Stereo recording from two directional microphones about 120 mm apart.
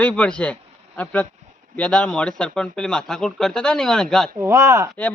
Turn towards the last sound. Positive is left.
turn(degrees=-25)  # may be behind; listen again after turning